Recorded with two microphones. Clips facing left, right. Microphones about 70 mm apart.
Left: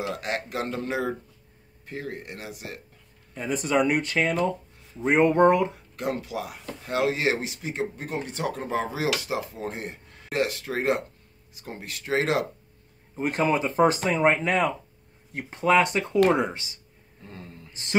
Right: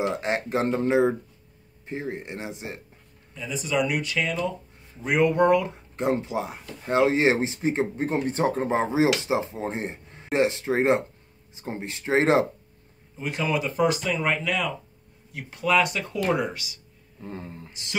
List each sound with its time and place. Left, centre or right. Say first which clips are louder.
0.1 s speech: right 4 dB; right
3.3 s speech: left 2 dB; left
5.9 s speech: right 5 dB; right
13.1 s speech: left 3 dB; left
17.2 s speech: right 6 dB; right